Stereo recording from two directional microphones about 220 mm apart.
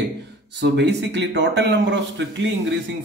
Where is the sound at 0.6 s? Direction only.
50° right (ahead or behind).